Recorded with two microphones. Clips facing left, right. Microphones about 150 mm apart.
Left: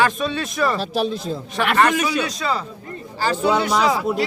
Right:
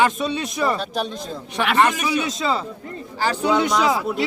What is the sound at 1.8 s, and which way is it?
A man's voice, 20° right (ahead or behind).